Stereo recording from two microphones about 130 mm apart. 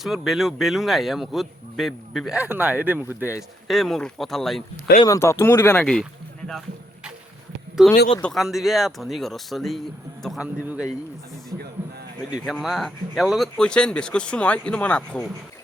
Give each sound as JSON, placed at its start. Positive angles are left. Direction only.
{"t": 0.0, "sound": "speech", "side_deg": 0}
{"t": 3.7, "sound": "speech", "side_deg": 0}
{"t": 5.0, "sound": "speech", "side_deg": 25}
{"t": 5.8, "sound": "speech", "side_deg": 0}
{"t": 7.8, "sound": "a man's voice", "side_deg": -5}
{"t": 11.5, "sound": "speech", "side_deg": -20}
{"t": 12.5, "sound": "speech", "side_deg": 0}